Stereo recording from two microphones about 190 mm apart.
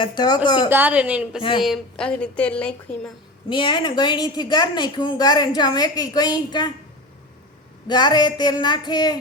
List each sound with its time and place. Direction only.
0.0 s a woman's voice: 25° left (ahead or behind)
0.7 s a woman's voice: 10° right (ahead or behind)
1.4 s a woman's voice: 25° left (ahead or behind)
1.6 s a woman's voice: centre (ahead or behind)
3.5 s a woman's voice: 25° left (ahead or behind)
7.9 s a woman's voice: 25° left (ahead or behind)